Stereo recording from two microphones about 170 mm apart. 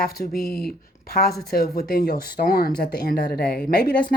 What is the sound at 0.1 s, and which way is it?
A woman's voice, 65° left (ahead or behind).